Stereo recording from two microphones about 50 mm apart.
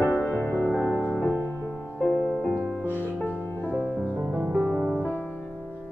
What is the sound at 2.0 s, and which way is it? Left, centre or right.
Music, centre.